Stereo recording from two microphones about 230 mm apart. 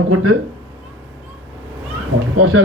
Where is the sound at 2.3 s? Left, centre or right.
Right.